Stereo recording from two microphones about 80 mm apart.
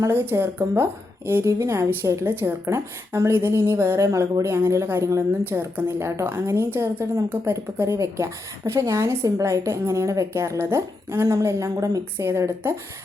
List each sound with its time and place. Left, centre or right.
0.1 s a woman's voice: right
5.4 s a woman's voice: right
12.1 s a woman's voice: right